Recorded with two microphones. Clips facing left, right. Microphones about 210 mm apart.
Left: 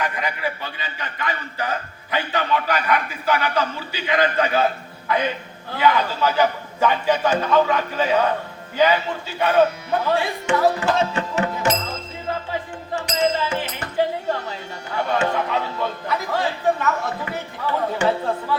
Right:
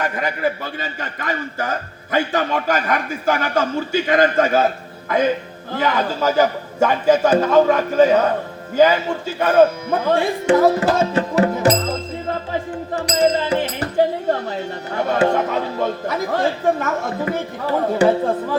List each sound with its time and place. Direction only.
0.0 s a man's voice: 45° right (ahead or behind)
13.0 s music: 40° right (ahead or behind)
14.3 s a man's voice: 45° right (ahead or behind)